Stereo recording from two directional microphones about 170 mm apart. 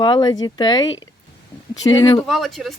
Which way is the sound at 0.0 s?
25° left (ahead or behind).